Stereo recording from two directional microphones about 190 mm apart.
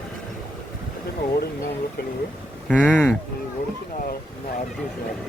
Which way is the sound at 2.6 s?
5° left (ahead or behind).